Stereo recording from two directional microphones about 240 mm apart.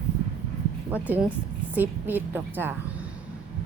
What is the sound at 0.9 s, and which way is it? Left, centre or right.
A woman's voice, centre.